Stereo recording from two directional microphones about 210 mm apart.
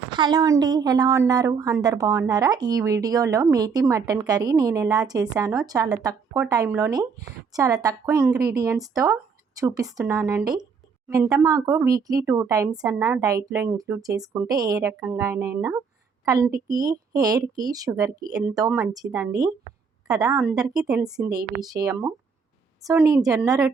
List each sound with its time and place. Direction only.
0.2 s a woman's voice: 20° right (ahead or behind)
21.2 s a woman's voice: 15° right (ahead or behind)